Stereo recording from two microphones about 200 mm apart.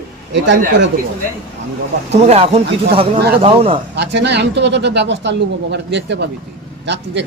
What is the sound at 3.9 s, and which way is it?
Speech, 60° right (ahead or behind).